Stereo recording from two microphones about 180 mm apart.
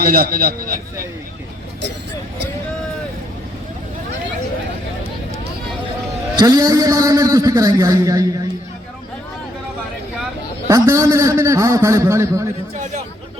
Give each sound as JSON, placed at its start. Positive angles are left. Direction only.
{"t": 0.0, "sound": "a man's voice", "side_deg": -55}
{"t": 6.4, "sound": "a man's voice", "side_deg": -20}
{"t": 10.7, "sound": "a man's voice", "side_deg": -15}